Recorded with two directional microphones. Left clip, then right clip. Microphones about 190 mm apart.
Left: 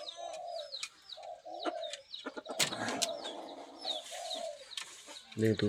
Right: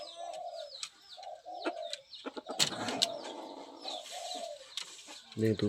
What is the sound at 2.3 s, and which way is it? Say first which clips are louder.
Vehicle: right 2 dB; 5° left (ahead or behind).